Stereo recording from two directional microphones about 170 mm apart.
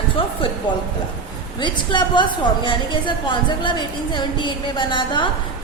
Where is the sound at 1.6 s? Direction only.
25° left (ahead or behind).